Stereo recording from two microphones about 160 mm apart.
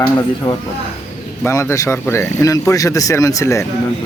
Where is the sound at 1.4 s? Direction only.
15° left (ahead or behind).